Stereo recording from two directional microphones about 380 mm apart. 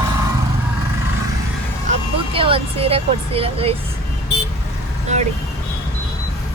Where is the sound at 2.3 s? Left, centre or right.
Centre.